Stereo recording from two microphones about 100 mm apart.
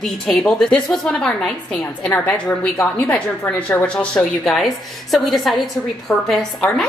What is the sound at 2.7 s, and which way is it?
A woman's voice, 25° left (ahead or behind).